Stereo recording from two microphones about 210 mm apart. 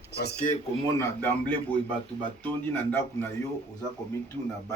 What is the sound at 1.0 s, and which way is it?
Speech, 10° left (ahead or behind).